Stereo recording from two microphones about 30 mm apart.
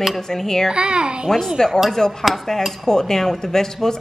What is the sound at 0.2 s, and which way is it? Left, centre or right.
Speech, centre.